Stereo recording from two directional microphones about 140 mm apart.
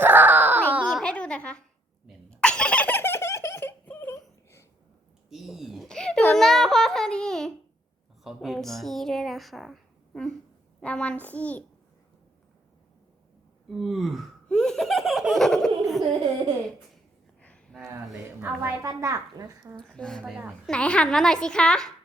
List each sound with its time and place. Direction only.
0.0 s baby cry: 15° right (ahead or behind)
0.9 s a sound: 5° left (ahead or behind)
2.0 s giggle: 5° left (ahead or behind)
5.3 s a sound: centre (ahead or behind)
10.8 s a child's voice: 10° left (ahead or behind)
13.7 s laughter: centre (ahead or behind)
17.4 s a sound: 10° left (ahead or behind)
17.7 s a child's voice: 10° right (ahead or behind)
19.7 s a woman's voice: 5° left (ahead or behind)
20.2 s a woman's voice: 10° right (ahead or behind)
20.7 s a woman's voice: 5° left (ahead or behind)